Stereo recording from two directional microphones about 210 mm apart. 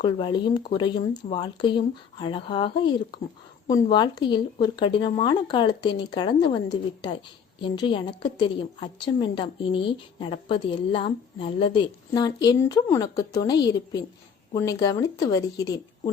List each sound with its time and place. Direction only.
0.0 s a woman's voice: 25° left (ahead or behind)